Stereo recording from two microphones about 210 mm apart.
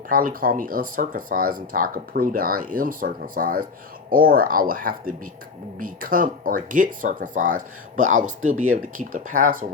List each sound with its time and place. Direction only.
0.1 s speech: 40° right (ahead or behind)